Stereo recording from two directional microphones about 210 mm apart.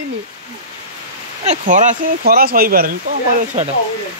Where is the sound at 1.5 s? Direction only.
40° right (ahead or behind).